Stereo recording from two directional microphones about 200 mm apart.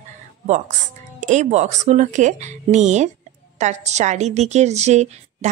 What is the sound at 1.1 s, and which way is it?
A woman's voice, 35° right (ahead or behind).